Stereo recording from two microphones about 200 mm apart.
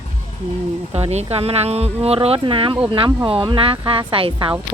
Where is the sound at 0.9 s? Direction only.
30° right (ahead or behind).